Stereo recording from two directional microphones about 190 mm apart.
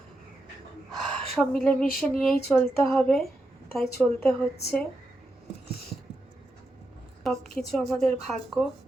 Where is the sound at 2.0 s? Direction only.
5° left (ahead or behind).